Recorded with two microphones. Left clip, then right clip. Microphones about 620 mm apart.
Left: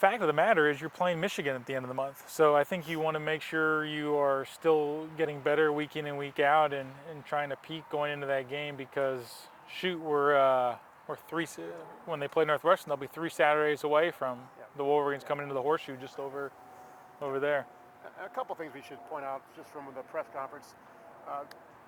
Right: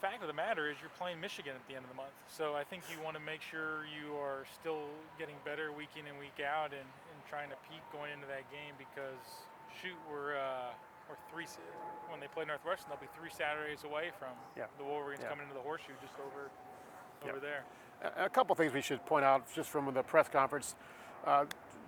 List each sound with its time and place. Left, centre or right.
0.0 s speech: left
18.0 s speech: right